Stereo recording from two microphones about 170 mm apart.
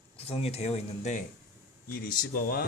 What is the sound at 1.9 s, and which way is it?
Speech, 60° left (ahead or behind).